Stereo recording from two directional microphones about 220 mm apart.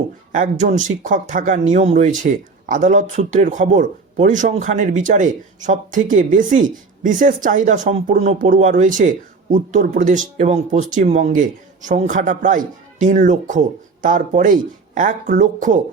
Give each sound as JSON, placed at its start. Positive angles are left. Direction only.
{"t": 0.3, "sound": "speech", "side_deg": -35}